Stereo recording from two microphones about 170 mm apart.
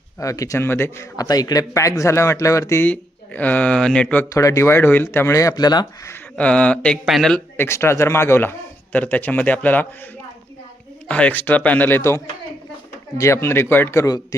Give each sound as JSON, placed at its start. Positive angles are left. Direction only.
{"t": 0.2, "sound": "a man's voice", "side_deg": 20}
{"t": 6.3, "sound": "a man's voice", "side_deg": 5}
{"t": 11.1, "sound": "a man's voice", "side_deg": 10}